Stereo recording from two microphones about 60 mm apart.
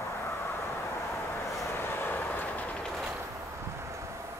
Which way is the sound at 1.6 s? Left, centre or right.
Left.